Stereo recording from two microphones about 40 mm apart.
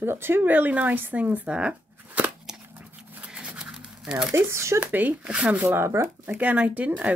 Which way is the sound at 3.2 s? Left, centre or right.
Right.